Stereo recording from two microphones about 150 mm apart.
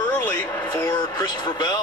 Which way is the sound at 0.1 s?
15° left (ahead or behind).